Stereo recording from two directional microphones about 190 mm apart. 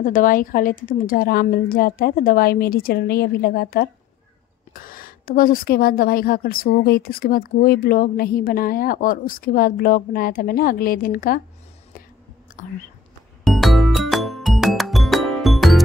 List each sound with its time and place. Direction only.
0.0 s a woman's voice: 45° left (ahead or behind)
12.6 s a woman's voice: 45° left (ahead or behind)
13.4 s music: centre (ahead or behind)